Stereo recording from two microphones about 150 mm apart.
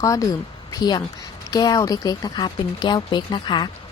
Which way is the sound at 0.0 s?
25° left (ahead or behind).